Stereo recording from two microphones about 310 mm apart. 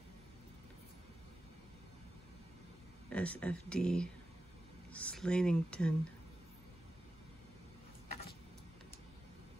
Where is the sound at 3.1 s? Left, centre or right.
Centre.